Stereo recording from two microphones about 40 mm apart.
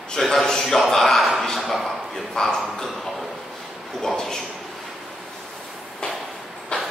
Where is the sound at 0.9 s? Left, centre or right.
Centre.